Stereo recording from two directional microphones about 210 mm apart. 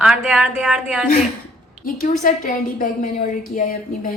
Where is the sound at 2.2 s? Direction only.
35° left (ahead or behind).